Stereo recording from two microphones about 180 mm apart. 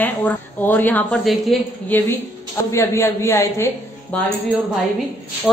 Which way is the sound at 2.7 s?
15° left (ahead or behind).